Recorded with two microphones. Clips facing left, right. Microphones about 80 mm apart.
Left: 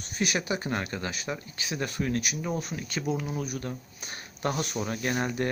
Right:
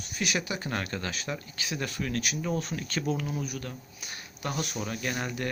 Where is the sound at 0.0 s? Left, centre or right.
Left.